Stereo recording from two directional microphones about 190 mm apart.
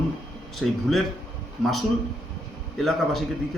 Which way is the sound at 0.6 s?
Centre (ahead or behind).